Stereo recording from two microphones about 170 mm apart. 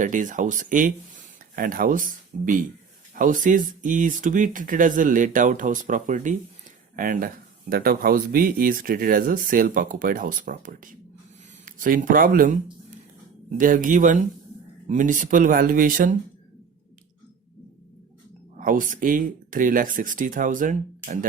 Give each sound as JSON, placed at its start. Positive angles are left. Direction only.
{"t": 0.0, "sound": "speech", "side_deg": -50}
{"t": 13.6, "sound": "speech", "side_deg": -50}
{"t": 18.5, "sound": "speech", "side_deg": -50}